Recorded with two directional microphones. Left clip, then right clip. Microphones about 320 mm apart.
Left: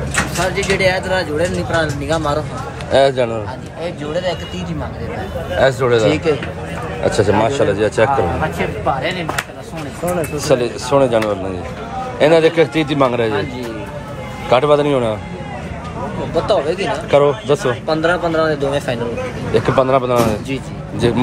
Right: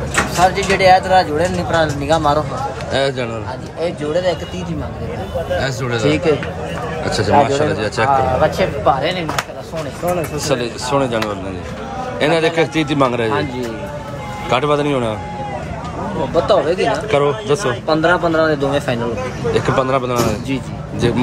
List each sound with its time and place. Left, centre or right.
0.1 s speech: right
2.9 s a man's voice: centre
3.8 s speech: centre
5.8 s a man's voice: centre
7.1 s a man's voice: centre
8.1 s a man's voice: right
10.4 s a man's voice: centre
14.5 s a man's voice: centre
16.3 s a man's voice: right
16.9 s a man's voice: centre
17.8 s a man's voice: right
19.5 s a man's voice: centre